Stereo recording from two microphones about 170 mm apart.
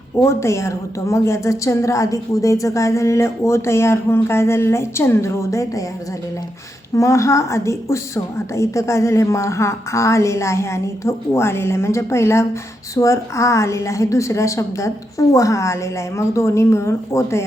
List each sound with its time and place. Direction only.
0.2 s a woman's voice: 15° left (ahead or behind)
6.9 s a woman's voice: 15° left (ahead or behind)